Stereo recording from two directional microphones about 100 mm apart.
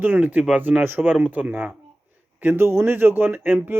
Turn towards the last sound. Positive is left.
turn(degrees=-20)  # may be behind; listen again after turning